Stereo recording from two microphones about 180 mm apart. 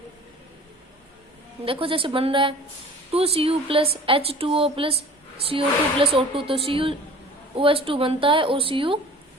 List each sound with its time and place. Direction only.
1.6 s a woman's voice: 30° right (ahead or behind)